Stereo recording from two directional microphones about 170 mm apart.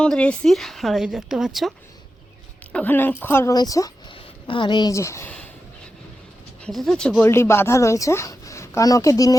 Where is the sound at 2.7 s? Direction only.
10° left (ahead or behind).